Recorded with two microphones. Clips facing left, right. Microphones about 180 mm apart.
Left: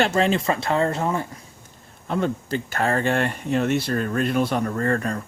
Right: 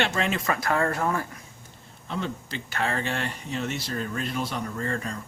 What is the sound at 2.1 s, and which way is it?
Speech, 50° left (ahead or behind).